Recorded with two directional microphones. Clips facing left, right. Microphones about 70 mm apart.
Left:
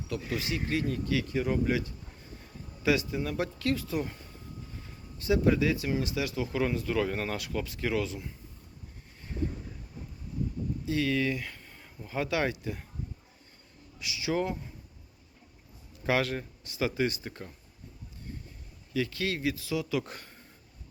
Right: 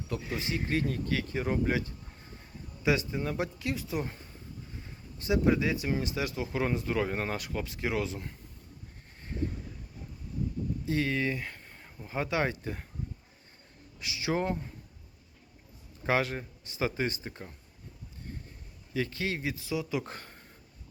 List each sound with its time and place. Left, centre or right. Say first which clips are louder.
0.1 s speech: left 1 dB; right
5.2 s speech: left 1 dB; right
10.8 s speech: left 2 dB; right
11.5 s a sound: even; right
12.0 s speech: left 1 dB; right
14.0 s speech: even; right
16.0 s speech: left 1 dB; right
18.9 s speech: left 1 dB; right